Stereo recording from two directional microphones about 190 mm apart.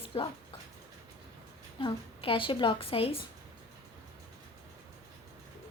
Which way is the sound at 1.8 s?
25° left (ahead or behind).